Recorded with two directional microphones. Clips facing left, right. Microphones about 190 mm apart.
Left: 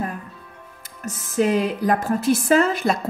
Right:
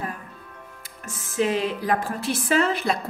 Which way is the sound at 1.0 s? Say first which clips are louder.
Left 4 dB; 45° left (ahead or behind).